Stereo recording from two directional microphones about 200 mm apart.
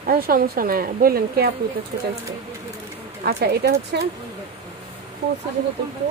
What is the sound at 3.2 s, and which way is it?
Speech, 50° right (ahead or behind).